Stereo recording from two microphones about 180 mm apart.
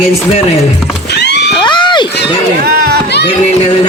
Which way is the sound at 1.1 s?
70° left (ahead or behind).